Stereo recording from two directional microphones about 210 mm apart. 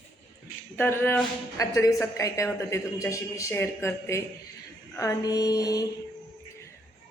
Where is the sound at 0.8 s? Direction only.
10° left (ahead or behind).